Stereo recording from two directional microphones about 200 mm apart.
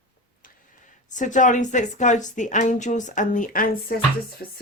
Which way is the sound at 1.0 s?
40° left (ahead or behind).